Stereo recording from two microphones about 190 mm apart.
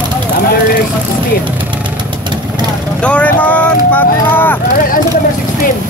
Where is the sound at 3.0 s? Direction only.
5° left (ahead or behind).